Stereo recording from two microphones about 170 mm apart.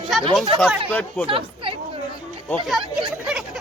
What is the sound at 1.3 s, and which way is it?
Speech, 30° right (ahead or behind).